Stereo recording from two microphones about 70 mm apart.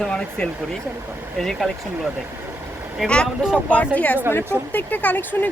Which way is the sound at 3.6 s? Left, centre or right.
Left.